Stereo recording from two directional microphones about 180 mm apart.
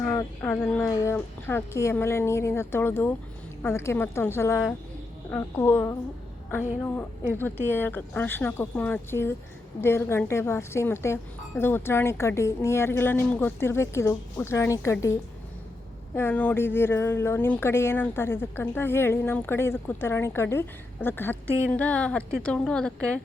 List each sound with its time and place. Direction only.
0.0 s speech: 10° left (ahead or behind)